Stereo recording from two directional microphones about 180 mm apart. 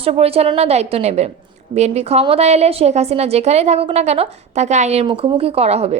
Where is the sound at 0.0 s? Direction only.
35° right (ahead or behind).